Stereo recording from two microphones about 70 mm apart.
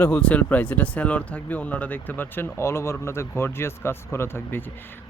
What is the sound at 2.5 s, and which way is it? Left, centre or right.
Speech, left.